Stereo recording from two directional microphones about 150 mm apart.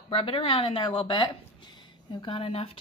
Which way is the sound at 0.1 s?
40° left (ahead or behind).